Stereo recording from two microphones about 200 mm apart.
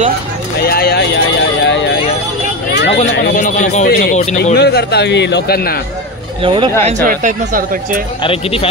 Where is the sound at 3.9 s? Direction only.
50° left (ahead or behind).